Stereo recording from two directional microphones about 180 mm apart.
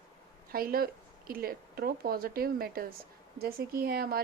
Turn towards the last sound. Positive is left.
turn(degrees=-60)  # may be behind; listen again after turning